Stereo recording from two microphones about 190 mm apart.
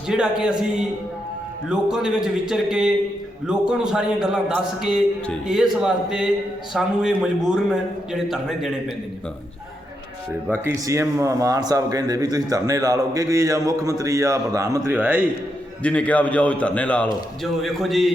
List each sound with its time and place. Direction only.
0.1 s a man's voice: 5° right (ahead or behind)
10.5 s a man's voice: 15° right (ahead or behind)
15.8 s a man's voice: 5° left (ahead or behind)